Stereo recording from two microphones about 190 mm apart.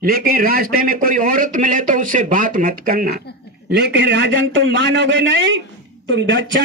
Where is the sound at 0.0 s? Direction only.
50° right (ahead or behind).